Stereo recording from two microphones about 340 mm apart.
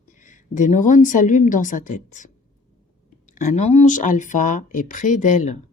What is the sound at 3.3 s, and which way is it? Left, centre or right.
Speech, left.